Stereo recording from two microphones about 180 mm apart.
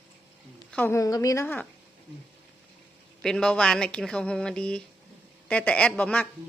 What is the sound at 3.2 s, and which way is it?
A woman's voice, 5° left (ahead or behind).